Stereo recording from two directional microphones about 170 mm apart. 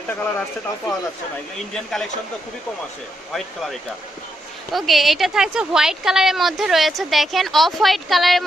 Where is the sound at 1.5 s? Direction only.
Centre (ahead or behind).